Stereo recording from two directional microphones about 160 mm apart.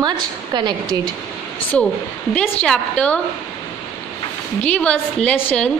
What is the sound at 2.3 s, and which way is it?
Speech, 5° left (ahead or behind).